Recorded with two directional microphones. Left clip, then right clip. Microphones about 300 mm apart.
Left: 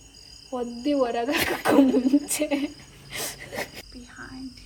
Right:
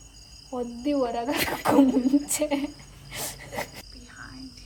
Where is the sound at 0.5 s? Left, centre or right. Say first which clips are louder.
Left 2 dB; right.